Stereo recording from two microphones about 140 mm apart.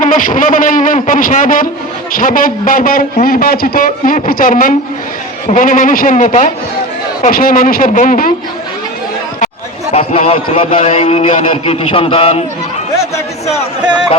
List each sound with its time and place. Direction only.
0.0 s a man's voice: 70° left (ahead or behind)
2.1 s a man's voice: 90° left; by 6.5 s 65° left (ahead or behind)
7.2 s a man's voice: 90° left; by 8.3 s 75° left (ahead or behind)
9.9 s a man's voice: 45° left (ahead or behind)